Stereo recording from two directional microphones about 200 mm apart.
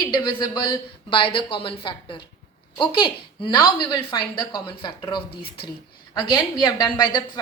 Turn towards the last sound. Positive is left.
turn(degrees=20)  # may be behind; listen again after turning